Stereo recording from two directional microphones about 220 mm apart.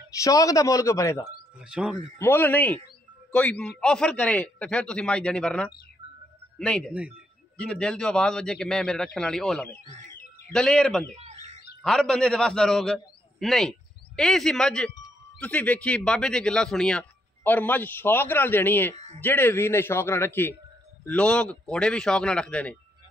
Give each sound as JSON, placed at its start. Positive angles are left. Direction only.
{"t": 0.2, "sound": "speech", "side_deg": 15}
{"t": 1.7, "sound": "a man's voice", "side_deg": -5}
{"t": 2.1, "sound": "a man's voice", "side_deg": 10}
{"t": 6.9, "sound": "speech", "side_deg": -5}
{"t": 7.5, "sound": "a man's voice", "side_deg": 5}
{"t": 11.1, "sound": "bird", "side_deg": -30}
{"t": 11.8, "sound": "a man's voice", "side_deg": 5}
{"t": 18.9, "sound": "a sound", "side_deg": -30}
{"t": 19.2, "sound": "a man's voice", "side_deg": 10}